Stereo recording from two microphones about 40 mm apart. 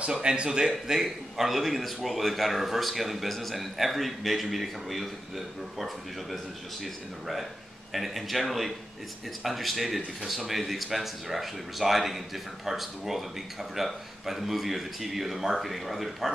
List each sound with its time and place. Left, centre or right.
0.0 s speech: right
0.7 s a man's voice: centre
6.3 s a man's voice: centre